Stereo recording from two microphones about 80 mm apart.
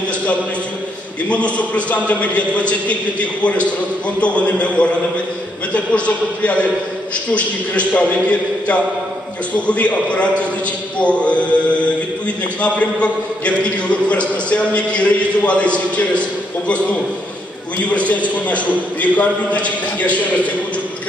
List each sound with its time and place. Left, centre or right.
1.3 s a man's voice: centre
12.6 s a man's voice: centre